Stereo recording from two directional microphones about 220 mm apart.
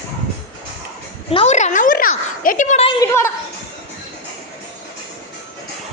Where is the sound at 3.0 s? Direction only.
10° left (ahead or behind).